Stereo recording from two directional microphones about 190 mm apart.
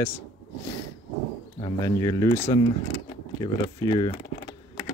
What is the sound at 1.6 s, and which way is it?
Speech, 20° left (ahead or behind).